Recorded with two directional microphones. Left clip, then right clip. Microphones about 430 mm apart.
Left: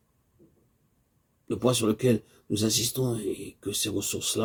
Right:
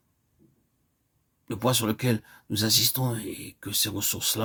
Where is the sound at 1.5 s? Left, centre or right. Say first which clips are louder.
Left 1 dB; right.